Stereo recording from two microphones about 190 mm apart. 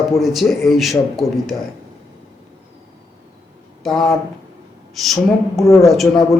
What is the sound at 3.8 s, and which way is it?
A man's voice, centre (ahead or behind).